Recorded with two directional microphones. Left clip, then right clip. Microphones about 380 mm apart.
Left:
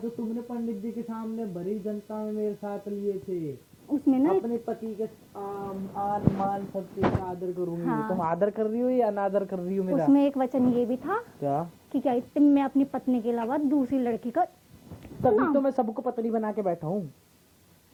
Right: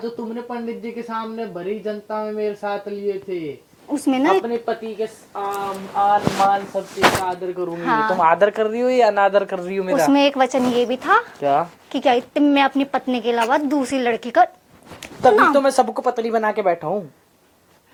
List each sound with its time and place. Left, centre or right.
0.0 s a woman's voice: centre
3.8 s a woman's voice: centre
4.1 s a woman's voice: centre